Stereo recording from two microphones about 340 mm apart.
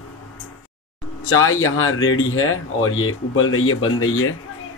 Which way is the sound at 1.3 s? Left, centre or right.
Left.